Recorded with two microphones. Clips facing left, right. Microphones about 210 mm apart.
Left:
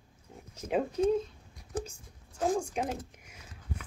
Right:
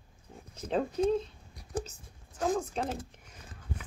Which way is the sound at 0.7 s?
10° left (ahead or behind).